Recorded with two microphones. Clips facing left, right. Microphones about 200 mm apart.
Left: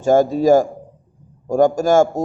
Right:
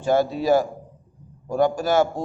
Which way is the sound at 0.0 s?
45° left (ahead or behind).